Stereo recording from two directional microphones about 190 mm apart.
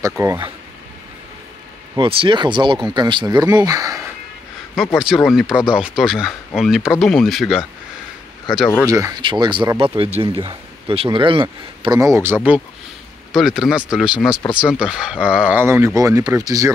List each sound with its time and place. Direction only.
0.2 s speech: 15° right (ahead or behind)
2.0 s speech: 25° right (ahead or behind)
4.9 s speech: centre (ahead or behind)
8.7 s speech: 15° right (ahead or behind)
13.3 s speech: centre (ahead or behind); by 16.7 s 20° right (ahead or behind)